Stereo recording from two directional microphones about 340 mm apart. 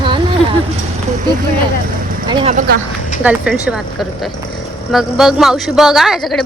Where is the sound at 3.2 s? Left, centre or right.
Centre.